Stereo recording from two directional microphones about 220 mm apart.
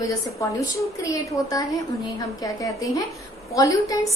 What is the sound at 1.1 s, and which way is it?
A woman's voice, 15° left (ahead or behind).